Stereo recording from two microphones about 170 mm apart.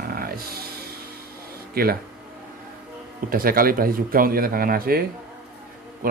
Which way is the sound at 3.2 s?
55° right (ahead or behind).